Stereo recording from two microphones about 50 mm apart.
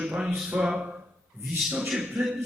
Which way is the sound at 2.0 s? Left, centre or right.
Centre.